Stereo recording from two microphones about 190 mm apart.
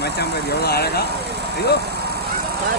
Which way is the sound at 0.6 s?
55° left (ahead or behind).